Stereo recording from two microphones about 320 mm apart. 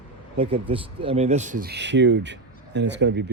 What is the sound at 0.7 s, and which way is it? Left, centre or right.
A man's voice, centre.